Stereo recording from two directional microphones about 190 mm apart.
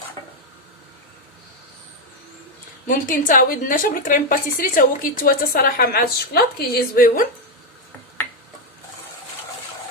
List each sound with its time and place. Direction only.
2.8 s a woman's voice: 45° left (ahead or behind)